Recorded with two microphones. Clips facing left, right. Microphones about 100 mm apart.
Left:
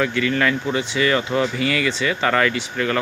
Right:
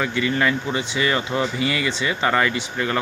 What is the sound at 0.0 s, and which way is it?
Speech, 15° right (ahead or behind).